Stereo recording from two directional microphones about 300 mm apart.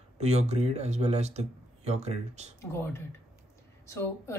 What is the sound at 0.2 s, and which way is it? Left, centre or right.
Speech, right.